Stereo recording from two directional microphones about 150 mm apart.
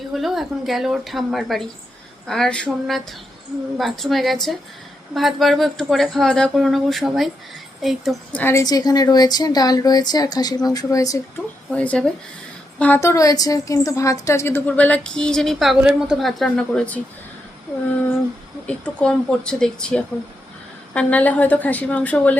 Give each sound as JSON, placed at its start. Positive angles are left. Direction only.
{"t": 0.1, "sound": "speech", "side_deg": 0}
{"t": 8.4, "sound": "a woman's voice", "side_deg": 15}
{"t": 8.6, "sound": "speech", "side_deg": 25}
{"t": 11.7, "sound": "a woman's voice", "side_deg": 10}
{"t": 18.6, "sound": "a woman's voice", "side_deg": 10}